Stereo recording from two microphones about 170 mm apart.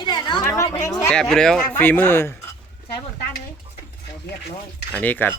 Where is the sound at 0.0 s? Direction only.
25° left (ahead or behind).